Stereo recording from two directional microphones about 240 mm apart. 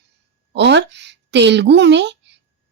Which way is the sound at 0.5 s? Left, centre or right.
Right.